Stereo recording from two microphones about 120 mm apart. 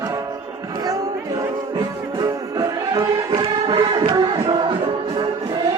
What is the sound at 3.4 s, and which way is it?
Music, 45° right (ahead or behind).